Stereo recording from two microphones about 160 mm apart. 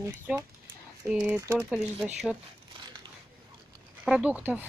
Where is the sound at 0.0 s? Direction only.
15° right (ahead or behind).